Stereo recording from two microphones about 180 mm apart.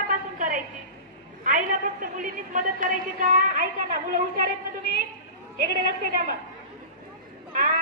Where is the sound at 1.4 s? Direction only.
45° right (ahead or behind).